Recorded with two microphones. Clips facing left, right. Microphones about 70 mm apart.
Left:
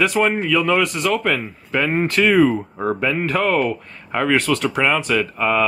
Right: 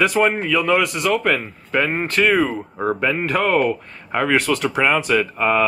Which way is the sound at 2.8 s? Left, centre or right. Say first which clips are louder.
Right 1 dB; centre.